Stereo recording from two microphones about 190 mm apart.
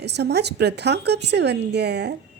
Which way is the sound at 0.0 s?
60° right (ahead or behind).